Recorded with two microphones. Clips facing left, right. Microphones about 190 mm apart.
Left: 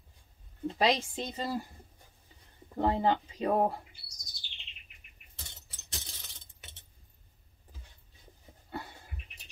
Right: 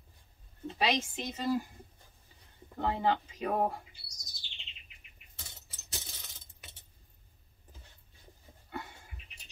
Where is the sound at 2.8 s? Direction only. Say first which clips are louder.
Left 3 dB; 30° left (ahead or behind).